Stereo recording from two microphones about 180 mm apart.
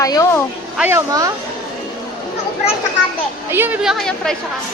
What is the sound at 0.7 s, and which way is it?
Speech, 10° right (ahead or behind).